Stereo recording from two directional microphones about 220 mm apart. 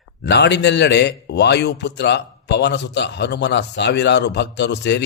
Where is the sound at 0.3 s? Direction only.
50° left (ahead or behind).